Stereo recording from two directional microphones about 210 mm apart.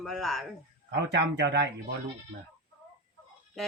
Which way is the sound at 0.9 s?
55° right (ahead or behind).